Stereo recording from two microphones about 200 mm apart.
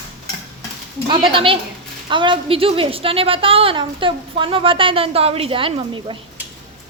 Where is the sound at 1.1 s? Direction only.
25° right (ahead or behind).